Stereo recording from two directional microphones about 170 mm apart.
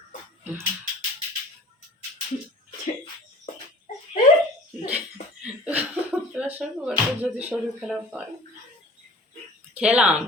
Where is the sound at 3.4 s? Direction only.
45° left (ahead or behind).